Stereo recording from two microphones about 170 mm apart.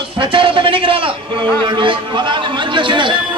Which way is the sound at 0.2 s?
30° right (ahead or behind).